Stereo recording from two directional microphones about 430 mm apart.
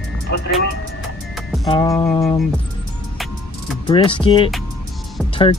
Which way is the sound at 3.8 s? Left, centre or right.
Centre.